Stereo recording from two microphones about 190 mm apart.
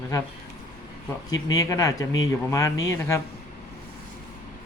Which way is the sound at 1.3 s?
20° left (ahead or behind).